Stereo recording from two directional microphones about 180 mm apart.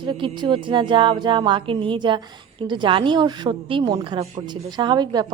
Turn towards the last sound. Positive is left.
turn(degrees=-25)  # may be behind; listen again after turning